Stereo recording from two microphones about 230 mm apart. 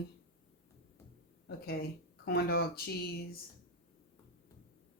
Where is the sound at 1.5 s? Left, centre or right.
Left.